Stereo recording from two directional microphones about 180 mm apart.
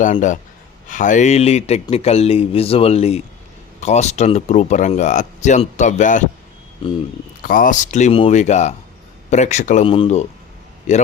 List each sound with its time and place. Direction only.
0.0 s speech: 45° left (ahead or behind)
7.4 s speech: 50° left (ahead or behind)
9.8 s speech: 30° left (ahead or behind)